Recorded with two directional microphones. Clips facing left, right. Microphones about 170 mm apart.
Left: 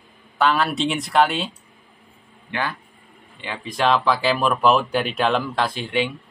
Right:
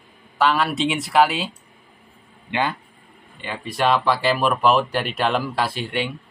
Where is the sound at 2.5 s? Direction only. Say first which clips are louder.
Right 3 dB; 20° right (ahead or behind).